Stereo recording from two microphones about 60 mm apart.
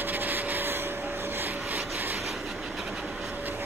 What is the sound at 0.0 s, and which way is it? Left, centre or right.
Vehicle, right.